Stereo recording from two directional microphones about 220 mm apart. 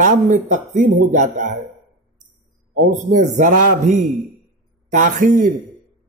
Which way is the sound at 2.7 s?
35° right (ahead or behind).